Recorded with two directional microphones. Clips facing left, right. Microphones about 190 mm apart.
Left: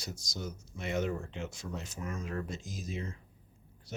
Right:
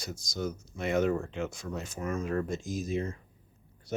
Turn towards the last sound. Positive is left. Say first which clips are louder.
# right 8 dB
turn(degrees=-50)  # may be behind; listen again after turning